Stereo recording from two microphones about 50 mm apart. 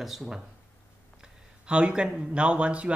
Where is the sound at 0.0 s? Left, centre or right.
Centre.